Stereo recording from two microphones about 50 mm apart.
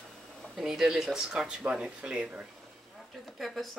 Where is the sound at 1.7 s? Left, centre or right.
Centre.